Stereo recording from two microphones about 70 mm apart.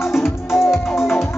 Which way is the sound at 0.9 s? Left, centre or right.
Left.